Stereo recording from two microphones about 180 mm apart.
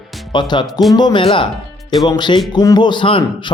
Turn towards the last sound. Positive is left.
turn(degrees=30)  # may be behind; listen again after turning